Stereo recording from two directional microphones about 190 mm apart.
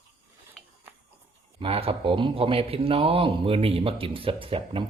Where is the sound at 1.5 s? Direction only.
30° right (ahead or behind).